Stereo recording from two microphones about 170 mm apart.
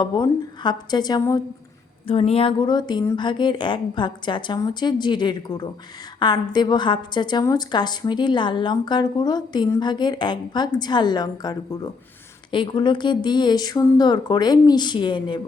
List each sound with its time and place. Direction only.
0.0 s a woman's voice: 25° left (ahead or behind)
2.0 s a woman's voice: 35° left (ahead or behind)